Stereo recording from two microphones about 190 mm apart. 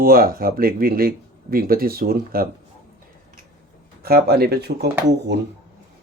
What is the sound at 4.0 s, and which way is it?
Speech, 55° right (ahead or behind).